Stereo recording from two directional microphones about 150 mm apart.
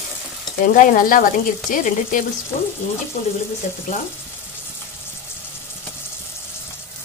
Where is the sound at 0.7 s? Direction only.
65° left (ahead or behind).